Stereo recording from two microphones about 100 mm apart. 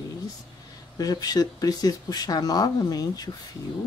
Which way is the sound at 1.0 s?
40° left (ahead or behind).